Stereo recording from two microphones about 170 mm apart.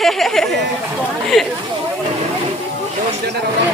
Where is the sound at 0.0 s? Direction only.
Centre (ahead or behind).